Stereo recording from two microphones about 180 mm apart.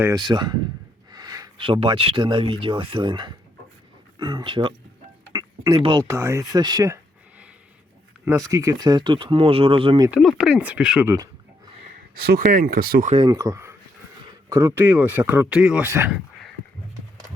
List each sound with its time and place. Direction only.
0.0 s speech: 20° right (ahead or behind)
10.1 s speech: centre (ahead or behind)
12.2 s speech: 60° right (ahead or behind)
13.1 s speech: 20° right (ahead or behind)